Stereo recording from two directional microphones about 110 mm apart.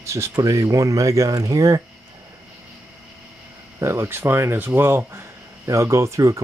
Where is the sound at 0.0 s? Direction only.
25° right (ahead or behind).